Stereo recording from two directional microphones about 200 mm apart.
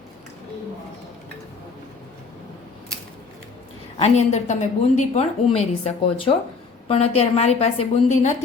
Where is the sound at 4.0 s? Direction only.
35° left (ahead or behind).